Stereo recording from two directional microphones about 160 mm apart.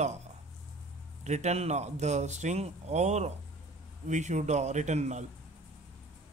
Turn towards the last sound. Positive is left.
turn(degrees=-45)  # may be behind; listen again after turning